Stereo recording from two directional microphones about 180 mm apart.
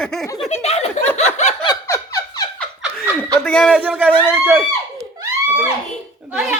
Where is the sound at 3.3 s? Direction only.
5° left (ahead or behind).